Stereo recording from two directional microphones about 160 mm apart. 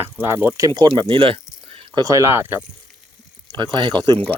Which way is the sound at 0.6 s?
30° right (ahead or behind).